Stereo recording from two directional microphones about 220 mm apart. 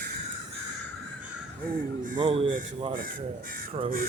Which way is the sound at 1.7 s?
35° right (ahead or behind).